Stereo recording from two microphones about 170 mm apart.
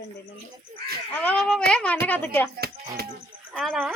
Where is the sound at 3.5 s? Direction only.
Centre (ahead or behind).